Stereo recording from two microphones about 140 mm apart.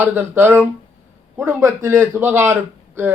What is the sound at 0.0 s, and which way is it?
Speech, 15° right (ahead or behind).